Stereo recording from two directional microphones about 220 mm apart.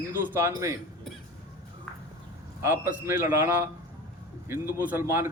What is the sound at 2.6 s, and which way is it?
Speech, 10° right (ahead or behind).